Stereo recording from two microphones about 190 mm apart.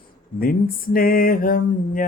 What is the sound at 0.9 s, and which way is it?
Mantra, 50° left (ahead or behind).